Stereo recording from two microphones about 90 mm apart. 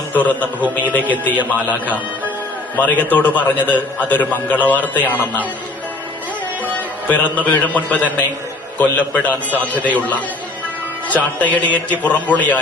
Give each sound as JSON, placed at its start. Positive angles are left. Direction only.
{"t": 0.1, "sound": "a man's voice", "side_deg": 15}
{"t": 1.3, "sound": "a man's voice", "side_deg": -15}
{"t": 2.7, "sound": "a man's voice", "side_deg": 15}
{"t": 7.1, "sound": "a man's voice", "side_deg": 15}